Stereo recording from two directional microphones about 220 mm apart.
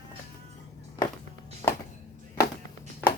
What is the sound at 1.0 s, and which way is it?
Music, 15° left (ahead or behind).